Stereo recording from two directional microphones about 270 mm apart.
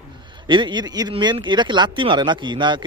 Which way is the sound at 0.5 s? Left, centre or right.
Centre.